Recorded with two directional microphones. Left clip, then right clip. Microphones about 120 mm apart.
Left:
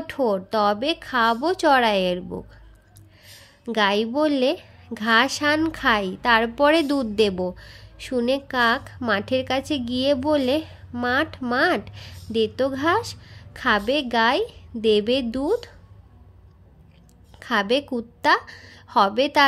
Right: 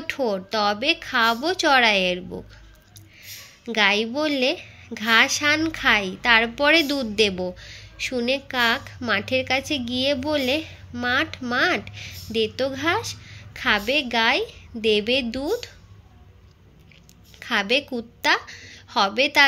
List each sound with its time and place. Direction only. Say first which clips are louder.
0.0 s a woman's voice: left 2 dB; 55° left (ahead or behind)
3.6 s a woman's voice: right 1 dB; 45° left (ahead or behind)
17.4 s a woman's voice: even; 50° left (ahead or behind)